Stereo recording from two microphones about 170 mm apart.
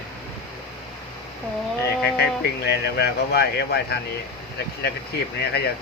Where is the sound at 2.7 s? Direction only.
75° left (ahead or behind).